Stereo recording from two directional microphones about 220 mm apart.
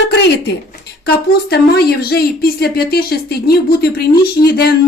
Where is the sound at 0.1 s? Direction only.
50° left (ahead or behind).